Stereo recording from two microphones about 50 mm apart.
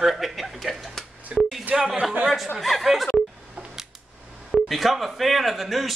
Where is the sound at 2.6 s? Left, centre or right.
Centre.